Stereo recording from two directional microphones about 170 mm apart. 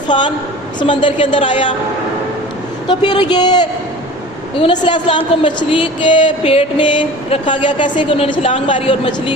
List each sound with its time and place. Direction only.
0.1 s speech: 30° left (ahead or behind)
3.0 s speech: 25° left (ahead or behind)